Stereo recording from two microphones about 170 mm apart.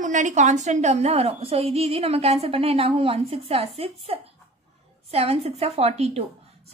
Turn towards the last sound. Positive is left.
turn(degrees=-40)  # may be behind; listen again after turning